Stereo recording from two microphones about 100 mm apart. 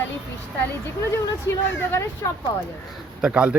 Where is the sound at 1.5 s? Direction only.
25° left (ahead or behind).